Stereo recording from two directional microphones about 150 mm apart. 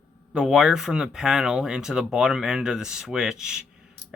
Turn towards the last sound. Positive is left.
turn(degrees=-5)  # may be behind; listen again after turning